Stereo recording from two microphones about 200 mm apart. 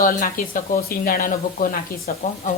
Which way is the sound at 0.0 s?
45° left (ahead or behind).